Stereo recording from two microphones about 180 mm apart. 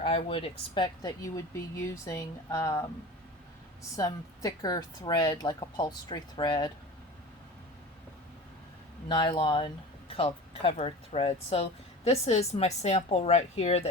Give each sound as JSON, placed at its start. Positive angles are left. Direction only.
{"t": 0.0, "sound": "speech", "side_deg": 30}
{"t": 3.9, "sound": "speech", "side_deg": 20}
{"t": 9.0, "sound": "speech", "side_deg": 25}